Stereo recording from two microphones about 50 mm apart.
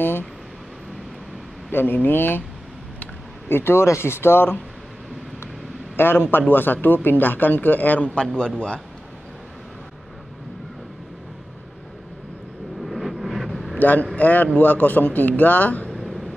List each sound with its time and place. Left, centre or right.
1.7 s speech: left
3.4 s speech: left
3.8 s speech: left
5.9 s a man's voice: left
8.0 s a man's voice: left
12.8 s vehicle: centre
13.7 s a man's voice: left
15.9 s a sound: centre